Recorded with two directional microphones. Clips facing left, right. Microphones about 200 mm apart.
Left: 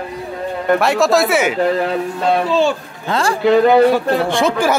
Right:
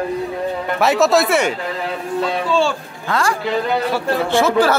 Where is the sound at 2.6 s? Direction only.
20° left (ahead or behind).